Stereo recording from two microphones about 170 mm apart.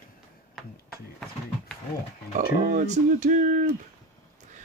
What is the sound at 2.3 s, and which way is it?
Speech, 45° right (ahead or behind).